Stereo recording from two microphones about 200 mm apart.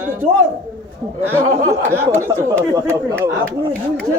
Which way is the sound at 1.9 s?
10° right (ahead or behind).